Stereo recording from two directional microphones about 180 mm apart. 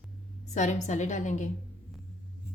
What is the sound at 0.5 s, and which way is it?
Speech, 40° left (ahead or behind).